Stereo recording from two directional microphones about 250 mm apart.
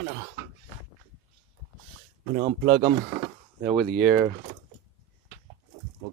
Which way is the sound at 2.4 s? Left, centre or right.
Right.